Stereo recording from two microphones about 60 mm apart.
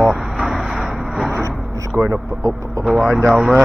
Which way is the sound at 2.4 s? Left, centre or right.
Right.